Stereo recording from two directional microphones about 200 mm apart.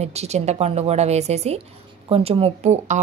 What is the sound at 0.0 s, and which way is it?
A woman's voice, 30° right (ahead or behind).